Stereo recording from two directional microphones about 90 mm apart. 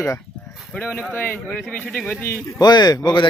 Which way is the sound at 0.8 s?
20° left (ahead or behind).